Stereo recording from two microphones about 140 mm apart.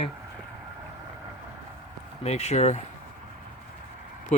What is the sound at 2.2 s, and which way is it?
Speech, 50° left (ahead or behind).